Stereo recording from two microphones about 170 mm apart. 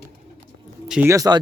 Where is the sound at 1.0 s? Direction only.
20° right (ahead or behind).